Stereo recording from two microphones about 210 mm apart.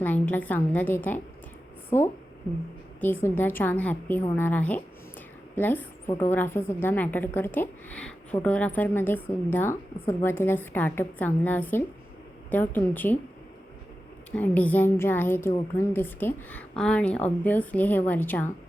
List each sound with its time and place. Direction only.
0.0 s a woman's voice: 10° left (ahead or behind)
14.3 s a woman's voice: 5° left (ahead or behind)